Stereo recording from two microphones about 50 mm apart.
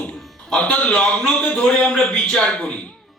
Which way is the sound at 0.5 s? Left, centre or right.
Left.